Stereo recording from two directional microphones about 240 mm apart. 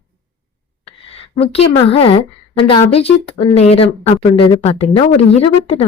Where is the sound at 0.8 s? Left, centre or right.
Left.